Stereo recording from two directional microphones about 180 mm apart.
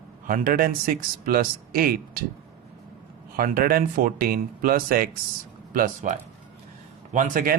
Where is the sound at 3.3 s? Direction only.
55° right (ahead or behind).